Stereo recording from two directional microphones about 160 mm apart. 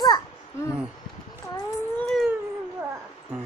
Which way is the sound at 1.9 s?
5° left (ahead or behind).